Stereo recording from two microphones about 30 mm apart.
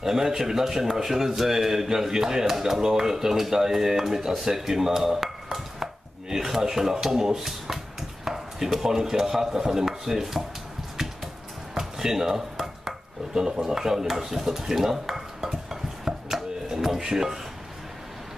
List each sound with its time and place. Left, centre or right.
0.0 s speech: centre
4.4 s dishes: centre
6.2 s speech: centre
8.3 s chopping: centre
8.6 s speech: centre
11.0 s drip: centre
11.7 s dishes: centre
14.0 s stir: centre